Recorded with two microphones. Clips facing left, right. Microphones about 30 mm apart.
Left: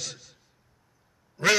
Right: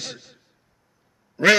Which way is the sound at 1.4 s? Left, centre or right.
Right.